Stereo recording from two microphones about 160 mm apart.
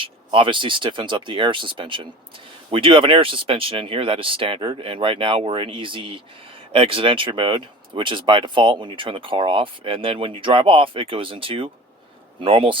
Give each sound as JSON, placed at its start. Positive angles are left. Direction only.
{"t": 0.0, "sound": "speech", "side_deg": -35}